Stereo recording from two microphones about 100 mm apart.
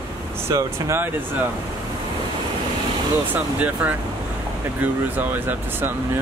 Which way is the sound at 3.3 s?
15° right (ahead or behind).